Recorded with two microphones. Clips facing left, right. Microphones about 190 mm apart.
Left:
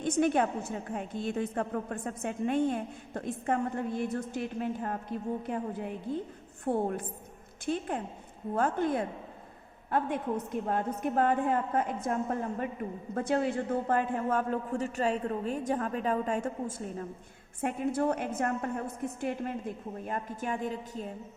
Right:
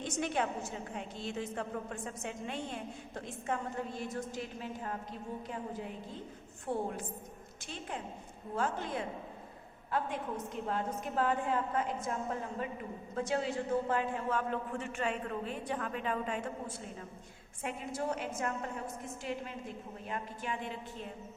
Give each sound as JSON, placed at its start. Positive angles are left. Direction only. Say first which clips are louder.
{"t": 0.0, "sound": "a woman's voice", "louder": "left 8 dB", "side_deg": 50}
{"t": 13.1, "sound": "a woman's voice", "louder": "left 5 dB", "side_deg": 55}